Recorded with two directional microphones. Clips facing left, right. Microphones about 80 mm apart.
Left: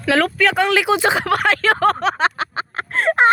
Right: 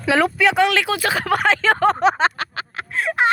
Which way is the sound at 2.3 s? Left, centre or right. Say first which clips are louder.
Left 4 dB; left.